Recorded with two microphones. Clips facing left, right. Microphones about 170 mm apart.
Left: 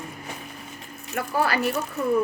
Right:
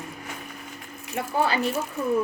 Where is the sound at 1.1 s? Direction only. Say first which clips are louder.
Even; 20° right (ahead or behind).